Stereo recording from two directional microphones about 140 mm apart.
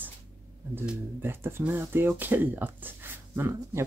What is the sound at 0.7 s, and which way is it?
Speech, 15° right (ahead or behind).